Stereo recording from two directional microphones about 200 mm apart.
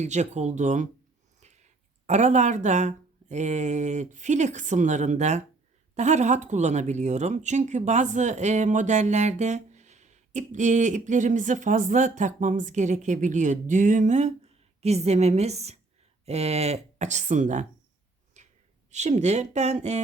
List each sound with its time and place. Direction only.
0.0 s speech: 35° right (ahead or behind)
18.4 s a sound: 35° right (ahead or behind)
18.9 s speech: 35° right (ahead or behind)